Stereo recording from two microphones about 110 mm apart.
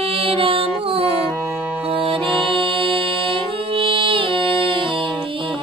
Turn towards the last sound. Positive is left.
turn(degrees=-55)  # may be behind; listen again after turning